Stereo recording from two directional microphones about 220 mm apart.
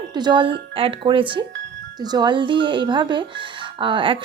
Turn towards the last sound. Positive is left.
turn(degrees=-20)  # may be behind; listen again after turning